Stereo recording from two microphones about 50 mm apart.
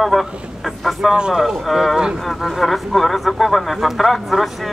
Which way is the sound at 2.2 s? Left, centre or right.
Centre.